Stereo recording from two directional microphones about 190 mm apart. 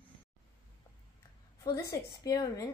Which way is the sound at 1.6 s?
15° left (ahead or behind).